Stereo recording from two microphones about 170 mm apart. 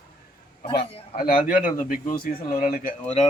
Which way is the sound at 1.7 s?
55° left (ahead or behind).